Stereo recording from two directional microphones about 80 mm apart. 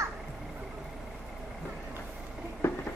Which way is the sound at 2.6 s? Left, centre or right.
Left.